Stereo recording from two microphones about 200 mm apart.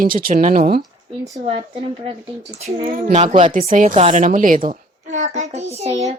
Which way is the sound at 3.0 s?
40° right (ahead or behind).